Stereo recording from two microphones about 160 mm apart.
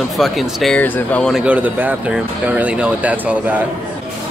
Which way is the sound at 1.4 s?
10° right (ahead or behind).